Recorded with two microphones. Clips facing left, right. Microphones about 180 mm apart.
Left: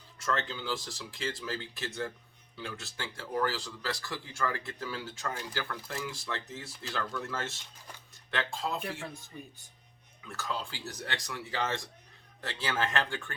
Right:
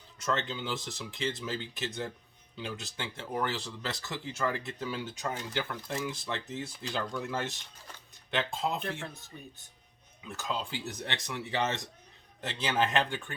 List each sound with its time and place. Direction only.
0.2 s speech: 20° right (ahead or behind)
8.8 s speech: 10° left (ahead or behind)
10.2 s speech: 20° right (ahead or behind)